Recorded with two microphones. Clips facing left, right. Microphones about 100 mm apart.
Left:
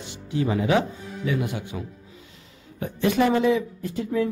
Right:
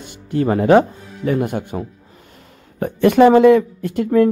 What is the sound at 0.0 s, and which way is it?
A woman's voice, 50° right (ahead or behind).